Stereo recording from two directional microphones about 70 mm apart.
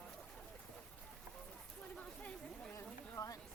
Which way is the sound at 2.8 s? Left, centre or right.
Left.